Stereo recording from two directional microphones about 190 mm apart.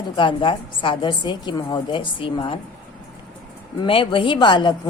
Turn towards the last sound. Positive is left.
turn(degrees=25)  # may be behind; listen again after turning